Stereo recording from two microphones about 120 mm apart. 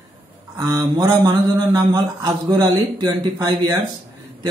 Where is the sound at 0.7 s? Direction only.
35° right (ahead or behind).